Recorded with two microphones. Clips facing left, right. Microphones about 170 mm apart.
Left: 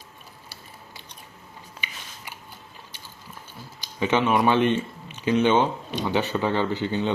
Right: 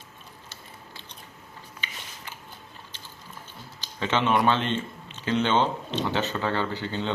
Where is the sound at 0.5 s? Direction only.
10° left (ahead or behind).